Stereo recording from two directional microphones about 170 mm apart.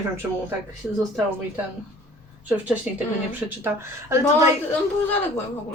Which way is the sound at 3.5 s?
15° right (ahead or behind).